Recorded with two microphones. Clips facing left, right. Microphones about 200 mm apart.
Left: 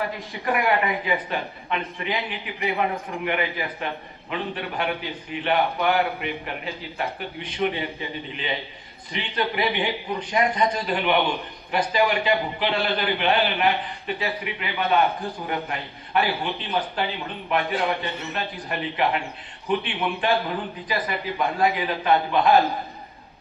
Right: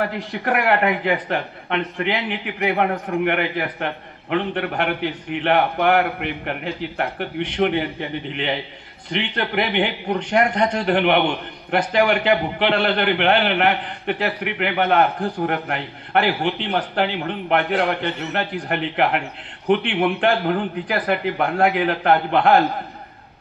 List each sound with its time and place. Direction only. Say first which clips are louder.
0.0 s a man's voice: right 4 dB; 70° right (ahead or behind)